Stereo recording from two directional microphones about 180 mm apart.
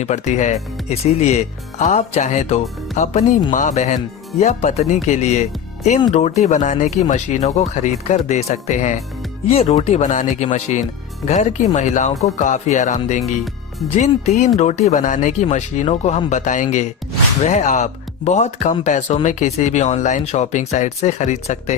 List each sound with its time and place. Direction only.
0.0 s speech: 40° left (ahead or behind)
13.2 s speech: centre (ahead or behind)
13.9 s speech: 40° left (ahead or behind)